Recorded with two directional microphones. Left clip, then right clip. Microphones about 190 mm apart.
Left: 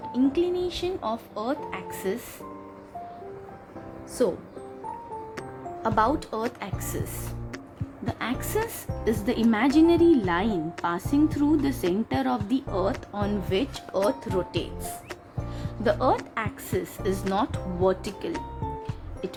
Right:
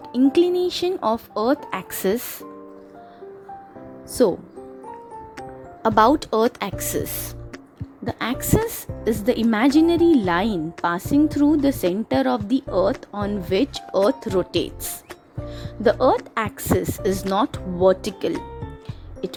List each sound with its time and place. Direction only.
0.1 s speech: 45° right (ahead or behind)
4.2 s speech: 45° right (ahead or behind)
5.8 s speech: 40° right (ahead or behind)
8.0 s speech: 35° right (ahead or behind)
15.4 s music: 35° right (ahead or behind)
16.3 s speech: 40° right (ahead or behind)